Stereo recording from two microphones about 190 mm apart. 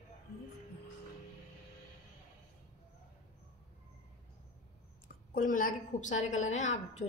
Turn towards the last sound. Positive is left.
turn(degrees=40)  # may be behind; listen again after turning